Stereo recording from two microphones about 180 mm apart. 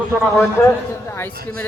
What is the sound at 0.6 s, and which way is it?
Speech, 15° left (ahead or behind).